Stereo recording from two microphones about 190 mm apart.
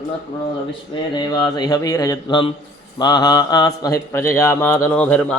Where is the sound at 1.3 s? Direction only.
20° left (ahead or behind).